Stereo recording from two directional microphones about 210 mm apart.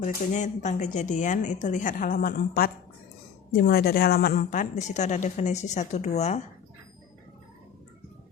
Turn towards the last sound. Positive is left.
turn(degrees=30)  # may be behind; listen again after turning